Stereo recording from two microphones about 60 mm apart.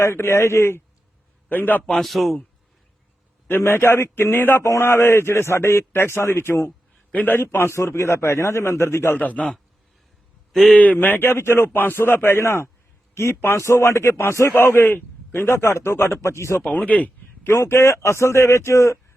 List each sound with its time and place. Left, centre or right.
0.0 s a man's voice: left
1.5 s speech: left
1.9 s a man's voice: centre
3.7 s a man's voice: left
7.1 s speech: left
7.4 s a man's voice: left
9.1 s speech: left
10.5 s a man's voice: centre
10.8 s a man's voice: left
14.1 s a man's voice: left
14.5 s a man's voice: left
16.6 s speech: left
17.5 s a man's voice: left